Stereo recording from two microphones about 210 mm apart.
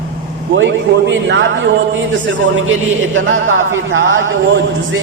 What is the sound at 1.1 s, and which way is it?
A man's voice, 60° right (ahead or behind).